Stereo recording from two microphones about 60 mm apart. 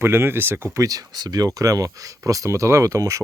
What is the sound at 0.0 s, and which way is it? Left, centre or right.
Speech, right.